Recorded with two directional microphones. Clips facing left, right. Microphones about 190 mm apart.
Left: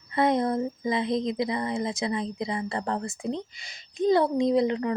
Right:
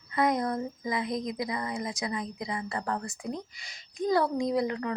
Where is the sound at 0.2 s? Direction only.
25° left (ahead or behind).